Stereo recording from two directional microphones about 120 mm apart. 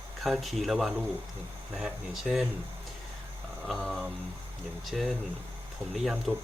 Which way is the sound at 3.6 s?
Centre (ahead or behind).